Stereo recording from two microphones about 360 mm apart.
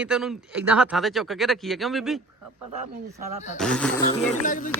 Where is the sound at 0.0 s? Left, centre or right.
Centre.